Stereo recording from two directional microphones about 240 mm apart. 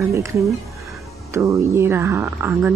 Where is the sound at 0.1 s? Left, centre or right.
Centre.